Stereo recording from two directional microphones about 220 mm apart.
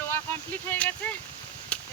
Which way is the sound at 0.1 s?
10° left (ahead or behind).